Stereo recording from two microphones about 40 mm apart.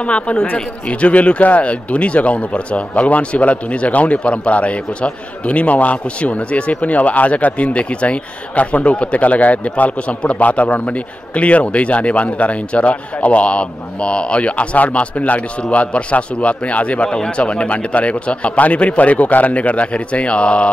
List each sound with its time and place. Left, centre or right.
0.0 s speech: left